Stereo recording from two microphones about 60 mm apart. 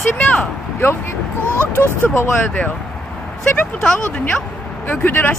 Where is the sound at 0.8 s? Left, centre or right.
Left.